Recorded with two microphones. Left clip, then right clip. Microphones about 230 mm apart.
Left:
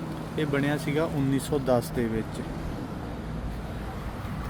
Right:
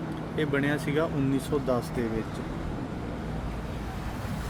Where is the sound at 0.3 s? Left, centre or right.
Centre.